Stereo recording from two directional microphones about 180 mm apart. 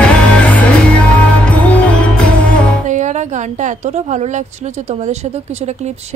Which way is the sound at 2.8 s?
40° right (ahead or behind).